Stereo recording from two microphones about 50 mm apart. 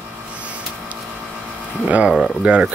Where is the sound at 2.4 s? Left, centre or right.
Centre.